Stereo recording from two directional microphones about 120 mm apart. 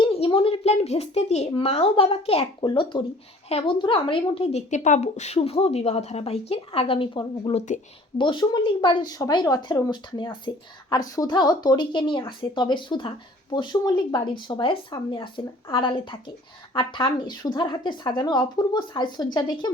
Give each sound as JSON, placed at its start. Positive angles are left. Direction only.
{"t": 0.0, "sound": "speech", "side_deg": 45}
{"t": 2.6, "sound": "a woman's voice", "side_deg": 40}
{"t": 4.5, "sound": "a woman's voice", "side_deg": 90}
{"t": 7.5, "sound": "speech", "side_deg": 90}
{"t": 8.2, "sound": "a woman's voice", "side_deg": 40}